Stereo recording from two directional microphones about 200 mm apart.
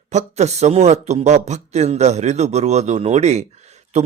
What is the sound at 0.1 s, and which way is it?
A man's voice, 35° right (ahead or behind).